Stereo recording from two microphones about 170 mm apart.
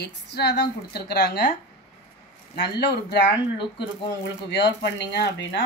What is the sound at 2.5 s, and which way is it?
Speech, 75° left (ahead or behind).